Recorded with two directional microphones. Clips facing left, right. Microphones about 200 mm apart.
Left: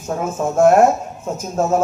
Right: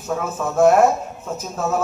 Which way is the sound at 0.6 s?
45° left (ahead or behind).